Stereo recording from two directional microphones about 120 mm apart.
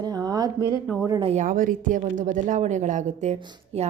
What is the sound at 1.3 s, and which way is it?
A woman's voice, 90° right.